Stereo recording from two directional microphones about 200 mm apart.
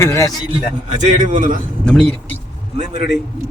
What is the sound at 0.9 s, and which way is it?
Speech, 40° right (ahead or behind).